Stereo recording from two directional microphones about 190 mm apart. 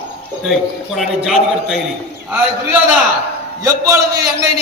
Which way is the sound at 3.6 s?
15° right (ahead or behind).